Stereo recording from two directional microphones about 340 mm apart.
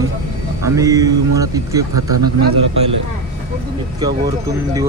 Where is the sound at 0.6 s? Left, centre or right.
Centre.